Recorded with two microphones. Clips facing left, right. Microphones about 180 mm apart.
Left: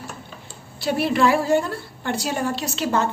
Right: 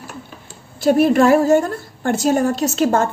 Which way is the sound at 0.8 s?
45° right (ahead or behind).